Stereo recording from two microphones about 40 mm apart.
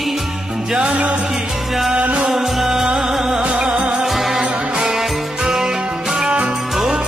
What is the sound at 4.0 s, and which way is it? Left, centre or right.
Music, centre.